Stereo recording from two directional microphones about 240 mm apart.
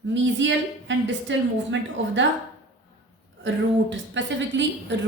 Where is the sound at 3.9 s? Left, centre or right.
Right.